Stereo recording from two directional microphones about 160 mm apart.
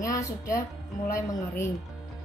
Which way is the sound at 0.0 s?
20° left (ahead or behind).